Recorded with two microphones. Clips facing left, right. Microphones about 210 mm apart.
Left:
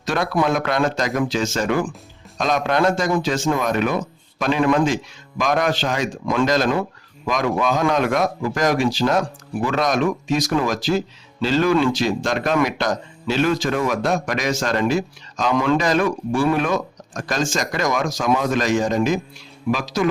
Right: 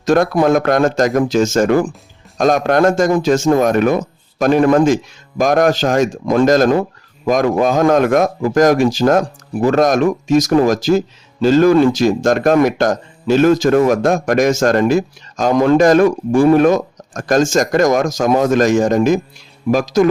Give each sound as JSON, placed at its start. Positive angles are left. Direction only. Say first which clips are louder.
{"t": 0.0, "sound": "a man's voice", "louder": "right 8 dB", "side_deg": -45}